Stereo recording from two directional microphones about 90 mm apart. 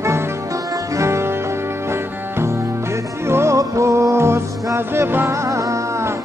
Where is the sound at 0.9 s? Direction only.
30° right (ahead or behind).